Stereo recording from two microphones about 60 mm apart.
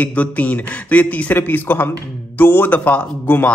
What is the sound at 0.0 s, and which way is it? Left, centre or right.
A man's voice, left.